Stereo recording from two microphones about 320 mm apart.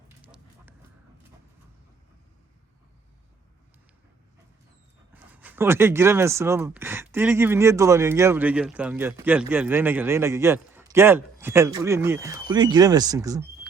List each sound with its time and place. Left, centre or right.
0.2 s dog: centre
5.1 s speech: centre